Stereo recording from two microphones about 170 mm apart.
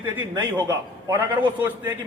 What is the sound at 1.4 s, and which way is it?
Speech, 10° right (ahead or behind).